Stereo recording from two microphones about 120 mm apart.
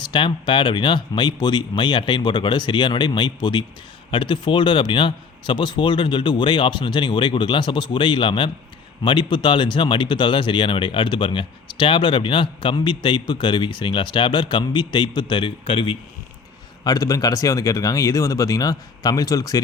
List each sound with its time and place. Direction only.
0.0 s speech: 45° left (ahead or behind)
16.8 s speech: 30° left (ahead or behind)